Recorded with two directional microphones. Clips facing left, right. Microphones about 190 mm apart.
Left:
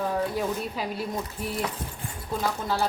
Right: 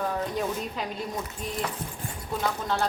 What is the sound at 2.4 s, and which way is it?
Speech, 5° left (ahead or behind).